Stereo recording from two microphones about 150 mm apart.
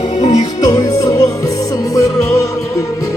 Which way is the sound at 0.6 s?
25° left (ahead or behind).